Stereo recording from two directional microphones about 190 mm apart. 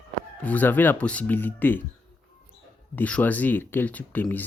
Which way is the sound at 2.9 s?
10° left (ahead or behind).